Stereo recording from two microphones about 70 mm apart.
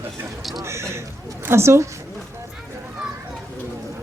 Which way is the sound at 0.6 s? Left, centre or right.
Right.